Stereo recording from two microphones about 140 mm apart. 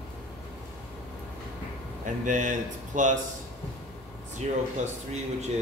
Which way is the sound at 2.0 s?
65° right (ahead or behind).